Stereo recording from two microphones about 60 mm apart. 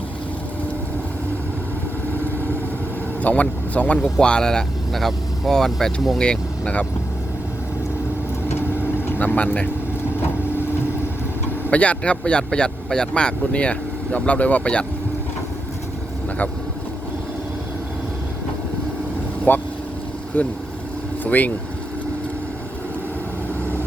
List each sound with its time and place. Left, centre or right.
3.2 s speech: left
9.0 s speech: left
11.7 s speech: left
19.5 s speech: left